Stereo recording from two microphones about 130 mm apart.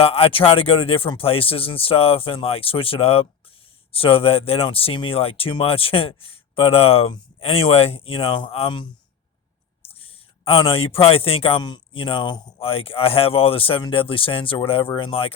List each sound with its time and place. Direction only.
0.0 s speech: 50° left (ahead or behind)
9.9 s speech: 45° left (ahead or behind)